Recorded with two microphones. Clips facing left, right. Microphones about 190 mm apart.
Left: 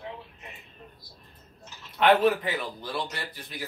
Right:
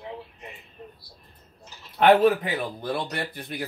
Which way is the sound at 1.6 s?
45° right (ahead or behind).